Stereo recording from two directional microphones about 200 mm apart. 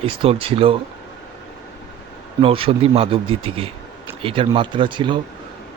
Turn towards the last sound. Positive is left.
turn(degrees=-25)  # may be behind; listen again after turning